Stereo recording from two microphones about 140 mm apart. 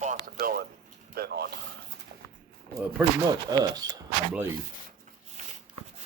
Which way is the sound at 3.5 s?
30° right (ahead or behind).